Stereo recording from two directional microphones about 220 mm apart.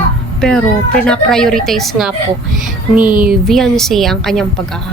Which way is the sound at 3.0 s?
40° right (ahead or behind).